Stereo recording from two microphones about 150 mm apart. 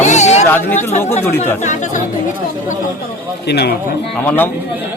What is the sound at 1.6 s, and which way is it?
Speech, 55° left (ahead or behind).